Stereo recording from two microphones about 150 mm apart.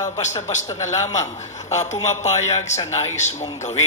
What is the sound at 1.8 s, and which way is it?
A man's voice, 50° left (ahead or behind).